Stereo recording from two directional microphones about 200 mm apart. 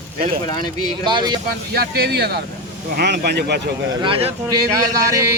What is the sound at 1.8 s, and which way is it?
Speech, 50° right (ahead or behind).